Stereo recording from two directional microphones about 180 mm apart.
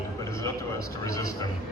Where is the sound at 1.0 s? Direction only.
20° left (ahead or behind).